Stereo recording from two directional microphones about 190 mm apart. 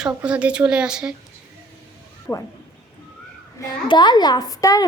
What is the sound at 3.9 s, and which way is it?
Speech, 25° left (ahead or behind).